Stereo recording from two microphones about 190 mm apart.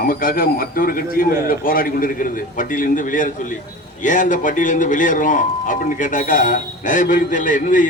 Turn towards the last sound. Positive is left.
turn(degrees=45)  # may be behind; listen again after turning